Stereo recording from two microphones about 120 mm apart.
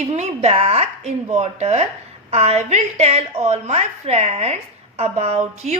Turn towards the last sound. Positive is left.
turn(degrees=-70)  # may be behind; listen again after turning